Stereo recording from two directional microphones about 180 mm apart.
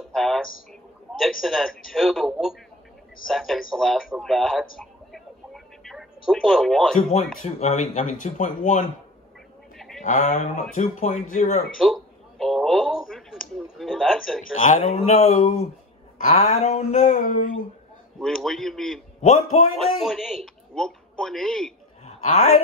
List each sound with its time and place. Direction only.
0.1 s a sound: centre (ahead or behind)
1.4 s speech: centre (ahead or behind)
4.7 s a sound: centre (ahead or behind)
7.4 s speech: 35° left (ahead or behind)
9.8 s a sound: centre (ahead or behind)
10.0 s speech: 45° left (ahead or behind)
11.8 s a sound: centre (ahead or behind)
15.1 s speech: 45° left (ahead or behind)
18.2 s speech: centre (ahead or behind)
19.2 s speech: 35° left (ahead or behind)
19.8 s a man's voice: centre (ahead or behind)
22.0 s chuckle: 35° left (ahead or behind)